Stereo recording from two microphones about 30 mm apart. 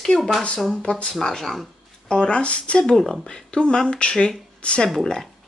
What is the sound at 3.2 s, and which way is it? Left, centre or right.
Speech, left.